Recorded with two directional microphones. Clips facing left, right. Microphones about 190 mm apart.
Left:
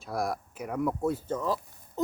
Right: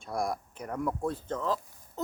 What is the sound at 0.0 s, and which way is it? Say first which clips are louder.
Speech: left 1 dB; centre (ahead or behind).